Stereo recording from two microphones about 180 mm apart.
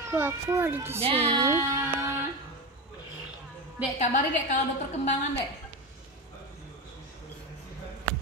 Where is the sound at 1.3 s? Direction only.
15° right (ahead or behind).